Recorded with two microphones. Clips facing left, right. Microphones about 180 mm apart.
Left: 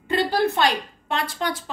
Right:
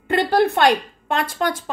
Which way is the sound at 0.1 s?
55° right (ahead or behind).